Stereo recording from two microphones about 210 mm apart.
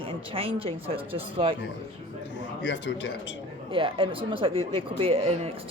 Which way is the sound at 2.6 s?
60° left (ahead or behind).